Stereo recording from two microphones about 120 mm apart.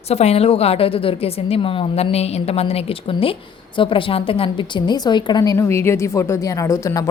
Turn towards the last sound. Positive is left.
turn(degrees=25)  # may be behind; listen again after turning